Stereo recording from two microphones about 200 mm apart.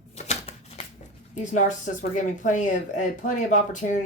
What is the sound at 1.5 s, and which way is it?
Speech, 40° left (ahead or behind).